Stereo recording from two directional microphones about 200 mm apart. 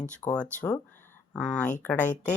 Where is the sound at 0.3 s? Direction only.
5° left (ahead or behind).